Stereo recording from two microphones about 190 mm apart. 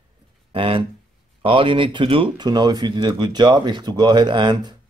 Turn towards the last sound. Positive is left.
turn(degrees=-20)  # may be behind; listen again after turning